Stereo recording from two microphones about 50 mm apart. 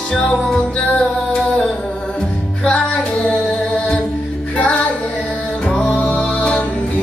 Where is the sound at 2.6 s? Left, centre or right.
Centre.